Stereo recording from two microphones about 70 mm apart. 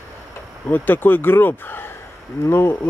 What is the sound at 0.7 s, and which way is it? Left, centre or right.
Speech, left.